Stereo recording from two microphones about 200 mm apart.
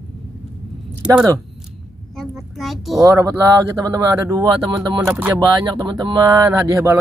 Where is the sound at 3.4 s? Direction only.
15° right (ahead or behind).